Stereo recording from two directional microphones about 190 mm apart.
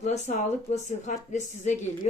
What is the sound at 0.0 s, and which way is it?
A woman's voice, 40° left (ahead or behind).